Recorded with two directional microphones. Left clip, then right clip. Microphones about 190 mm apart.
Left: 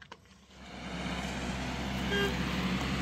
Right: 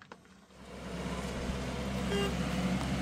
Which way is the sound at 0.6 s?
70° right (ahead or behind).